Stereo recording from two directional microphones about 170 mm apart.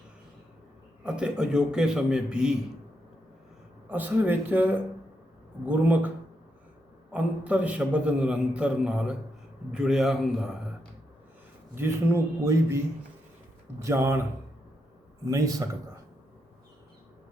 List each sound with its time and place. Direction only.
1.0 s a man's voice: 5° right (ahead or behind)
3.8 s a man's voice: 10° right (ahead or behind)
7.1 s a man's voice: 10° right (ahead or behind)
11.7 s a man's voice: 15° right (ahead or behind)
15.2 s a man's voice: 20° right (ahead or behind)